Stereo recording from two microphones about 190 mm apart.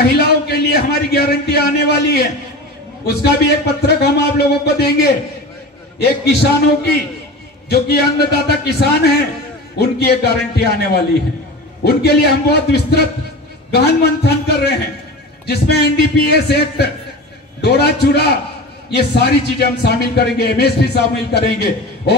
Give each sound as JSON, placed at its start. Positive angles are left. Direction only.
{"t": 0.0, "sound": "a man's voice", "side_deg": 55}
{"t": 7.7, "sound": "a man's voice", "side_deg": 55}